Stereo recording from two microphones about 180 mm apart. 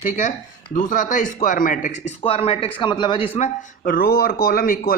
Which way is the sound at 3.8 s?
55° left (ahead or behind).